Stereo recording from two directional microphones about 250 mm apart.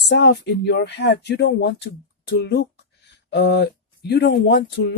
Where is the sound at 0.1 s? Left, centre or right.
Left.